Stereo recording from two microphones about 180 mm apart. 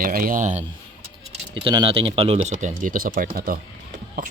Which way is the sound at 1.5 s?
30° right (ahead or behind).